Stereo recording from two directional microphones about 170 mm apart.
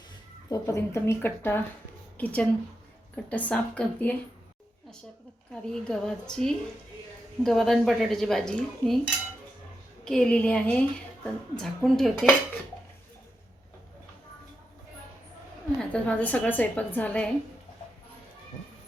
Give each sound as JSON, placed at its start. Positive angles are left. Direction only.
{"t": 0.5, "sound": "a woman's voice", "side_deg": 15}
{"t": 5.5, "sound": "a woman's voice", "side_deg": 5}
{"t": 15.8, "sound": "a woman's voice", "side_deg": 5}